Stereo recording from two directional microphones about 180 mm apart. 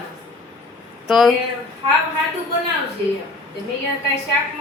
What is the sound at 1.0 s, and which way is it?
Speech, centre (ahead or behind).